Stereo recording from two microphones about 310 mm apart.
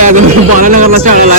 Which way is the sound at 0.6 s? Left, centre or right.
Right.